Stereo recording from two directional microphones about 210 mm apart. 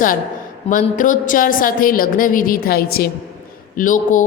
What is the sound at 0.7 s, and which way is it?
A woman's voice, 40° left (ahead or behind).